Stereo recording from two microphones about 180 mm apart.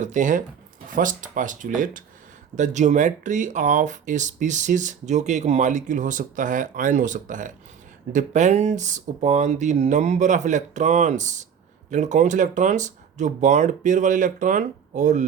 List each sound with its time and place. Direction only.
0.0 s speech: 45° right (ahead or behind)